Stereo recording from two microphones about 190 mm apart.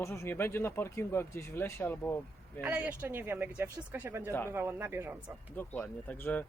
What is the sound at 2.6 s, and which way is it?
Speech, 10° right (ahead or behind).